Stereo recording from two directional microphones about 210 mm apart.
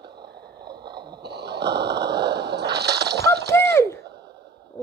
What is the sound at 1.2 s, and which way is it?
Snoring, 50° right (ahead or behind).